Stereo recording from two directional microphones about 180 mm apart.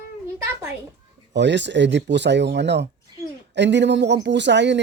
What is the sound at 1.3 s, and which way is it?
A man's voice, 75° right (ahead or behind).